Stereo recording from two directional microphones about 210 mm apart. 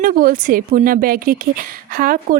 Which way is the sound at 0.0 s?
40° right (ahead or behind).